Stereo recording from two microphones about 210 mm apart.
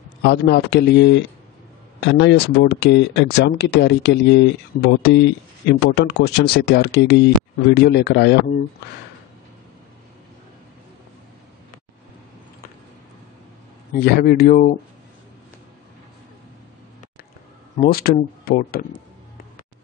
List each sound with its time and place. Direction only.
0.2 s speech: 50° left (ahead or behind)
13.9 s speech: 45° left (ahead or behind)
17.7 s speech: 45° left (ahead or behind)